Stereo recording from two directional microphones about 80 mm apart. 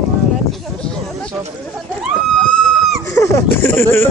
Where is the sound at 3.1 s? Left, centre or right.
Left.